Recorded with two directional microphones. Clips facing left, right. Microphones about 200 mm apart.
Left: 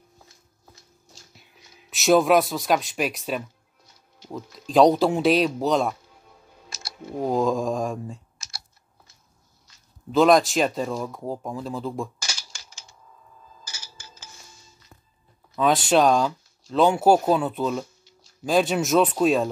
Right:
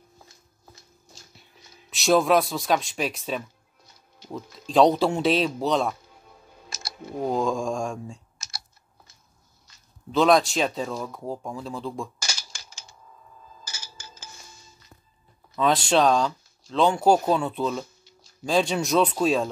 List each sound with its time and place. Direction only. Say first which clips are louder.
1.9 s speech: left 2 dB; centre (ahead or behind)
7.2 s speech: left 2 dB; centre (ahead or behind)
10.1 s speech: left 2 dB; centre (ahead or behind)
13.7 s music: right 2 dB; 45° right (ahead or behind)
15.5 s speech: left 2 dB; centre (ahead or behind)